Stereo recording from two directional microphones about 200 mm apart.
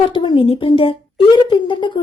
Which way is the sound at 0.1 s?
25° left (ahead or behind).